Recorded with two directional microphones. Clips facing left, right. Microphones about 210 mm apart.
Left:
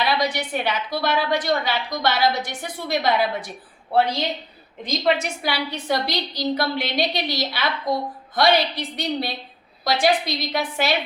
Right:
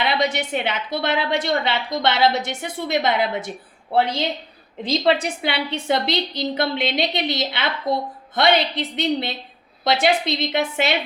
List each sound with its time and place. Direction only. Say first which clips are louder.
0.0 s a woman's voice: right 1 dB; 25° right (ahead or behind)
4.8 s a woman's voice: right 2 dB; 30° right (ahead or behind)